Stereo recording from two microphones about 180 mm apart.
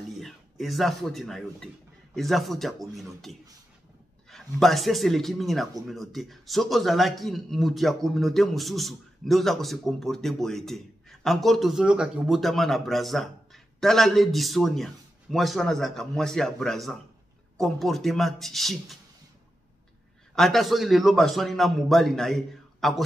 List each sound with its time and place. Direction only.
0.2 s speech: centre (ahead or behind)
20.3 s speech: centre (ahead or behind)